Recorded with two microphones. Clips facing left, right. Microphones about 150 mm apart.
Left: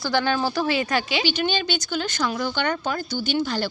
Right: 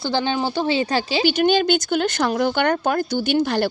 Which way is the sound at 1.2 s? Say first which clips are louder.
Right 7 dB; 50° right (ahead or behind).